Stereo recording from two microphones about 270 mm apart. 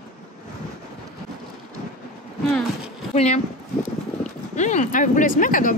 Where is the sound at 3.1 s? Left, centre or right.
Left.